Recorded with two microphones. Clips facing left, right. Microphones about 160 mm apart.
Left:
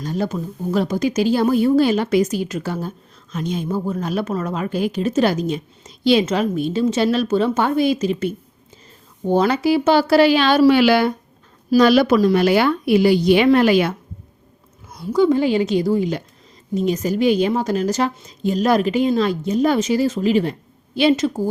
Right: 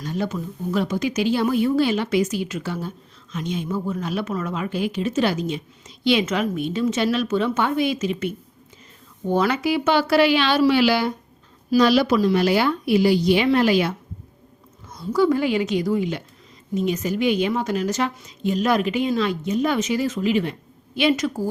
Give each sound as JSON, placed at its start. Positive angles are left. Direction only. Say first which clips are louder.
{"t": 0.0, "sound": "a woman's voice", "louder": "left 3 dB", "side_deg": 40}
{"t": 14.9, "sound": "a woman's voice", "louder": "left 3 dB", "side_deg": 15}